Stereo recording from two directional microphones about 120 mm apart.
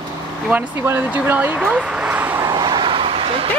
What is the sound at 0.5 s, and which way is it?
Speech, 20° right (ahead or behind).